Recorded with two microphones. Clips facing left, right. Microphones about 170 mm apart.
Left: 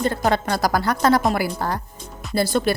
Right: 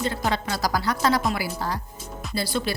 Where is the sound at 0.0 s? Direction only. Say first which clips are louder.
Left 5 dB; 50° left (ahead or behind).